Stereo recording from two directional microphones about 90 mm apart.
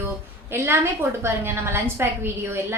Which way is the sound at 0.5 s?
25° right (ahead or behind).